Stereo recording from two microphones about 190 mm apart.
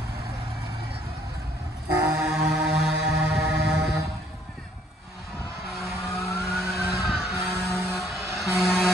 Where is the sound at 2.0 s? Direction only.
10° right (ahead or behind).